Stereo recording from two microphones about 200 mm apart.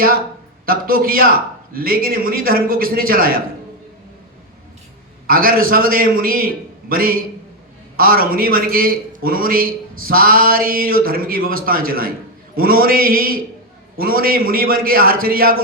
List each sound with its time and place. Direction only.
0.6 s a man's voice: 45° right (ahead or behind)
5.2 s a man's voice: 45° right (ahead or behind)